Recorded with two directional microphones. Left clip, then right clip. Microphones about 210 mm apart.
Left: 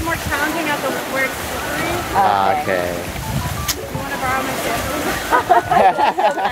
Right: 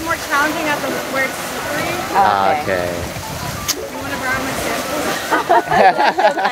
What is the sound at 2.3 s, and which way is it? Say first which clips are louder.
Speech: right 1 dB; centre (ahead or behind).